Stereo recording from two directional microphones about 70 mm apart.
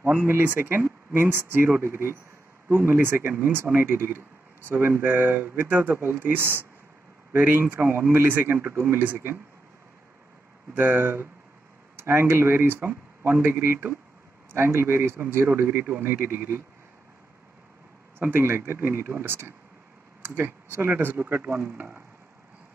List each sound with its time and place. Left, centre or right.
0.0 s speech: right
10.7 s speech: right
18.2 s speech: right